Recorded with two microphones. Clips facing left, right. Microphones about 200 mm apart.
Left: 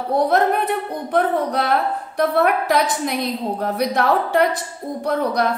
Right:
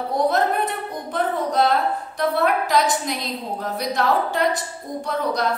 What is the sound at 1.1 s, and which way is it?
A woman's voice, 60° left (ahead or behind).